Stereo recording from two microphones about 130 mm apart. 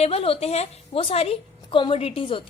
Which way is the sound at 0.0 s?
50° left (ahead or behind).